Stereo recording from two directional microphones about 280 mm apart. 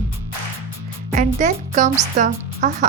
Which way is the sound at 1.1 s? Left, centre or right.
Right.